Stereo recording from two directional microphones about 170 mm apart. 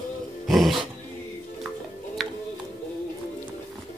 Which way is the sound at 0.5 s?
Centre (ahead or behind).